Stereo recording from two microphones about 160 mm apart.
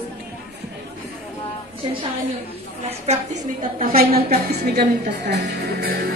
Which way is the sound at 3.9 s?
75° right (ahead or behind).